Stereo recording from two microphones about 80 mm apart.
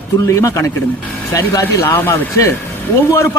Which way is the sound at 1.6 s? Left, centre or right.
Left.